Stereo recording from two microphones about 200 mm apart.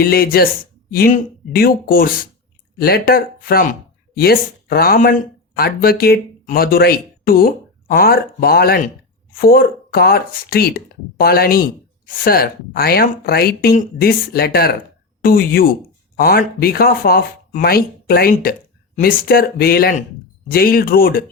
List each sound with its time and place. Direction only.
0.0 s speech: 50° left (ahead or behind)